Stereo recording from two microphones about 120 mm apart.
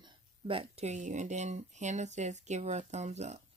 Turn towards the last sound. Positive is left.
turn(degrees=-70)  # may be behind; listen again after turning